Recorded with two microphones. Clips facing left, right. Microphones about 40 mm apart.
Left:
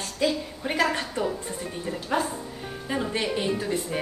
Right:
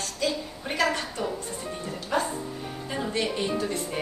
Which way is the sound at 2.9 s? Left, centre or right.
Centre.